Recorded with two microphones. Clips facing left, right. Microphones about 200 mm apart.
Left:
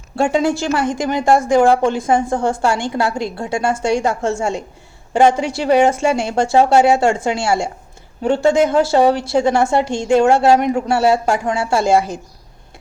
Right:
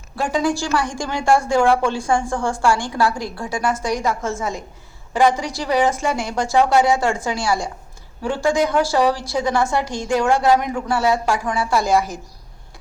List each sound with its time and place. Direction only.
0.2 s a woman's voice: 25° left (ahead or behind)